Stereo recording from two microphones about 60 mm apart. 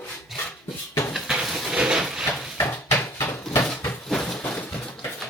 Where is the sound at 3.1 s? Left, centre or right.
Left.